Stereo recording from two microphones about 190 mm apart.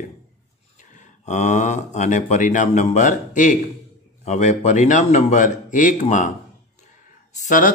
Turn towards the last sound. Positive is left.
turn(degrees=45)  # may be behind; listen again after turning